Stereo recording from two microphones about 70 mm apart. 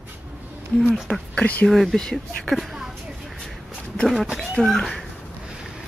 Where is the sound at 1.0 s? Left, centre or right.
Centre.